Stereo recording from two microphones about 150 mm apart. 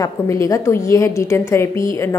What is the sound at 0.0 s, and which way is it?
A woman's voice, 20° left (ahead or behind).